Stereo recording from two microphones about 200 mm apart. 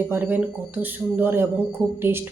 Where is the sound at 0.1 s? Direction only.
10° right (ahead or behind).